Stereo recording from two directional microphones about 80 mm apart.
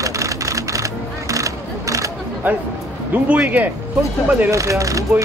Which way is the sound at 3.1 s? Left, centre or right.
Centre.